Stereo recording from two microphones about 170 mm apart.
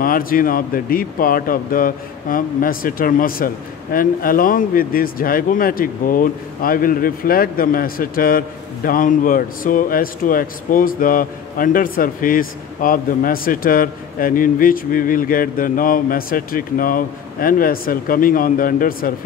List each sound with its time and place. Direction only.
0.0 s speech: 55° left (ahead or behind)